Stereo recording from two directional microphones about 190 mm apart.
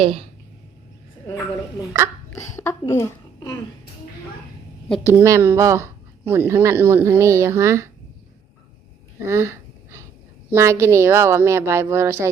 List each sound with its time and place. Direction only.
0.0 s speech: 30° right (ahead or behind)
2.3 s a child's voice: 15° left (ahead or behind)
5.0 s speech: 15° right (ahead or behind)
9.2 s a sound: 15° right (ahead or behind)
10.5 s speech: 15° right (ahead or behind)